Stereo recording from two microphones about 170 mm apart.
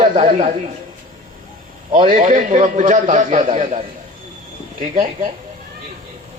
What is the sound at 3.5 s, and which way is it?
Speech, 35° right (ahead or behind).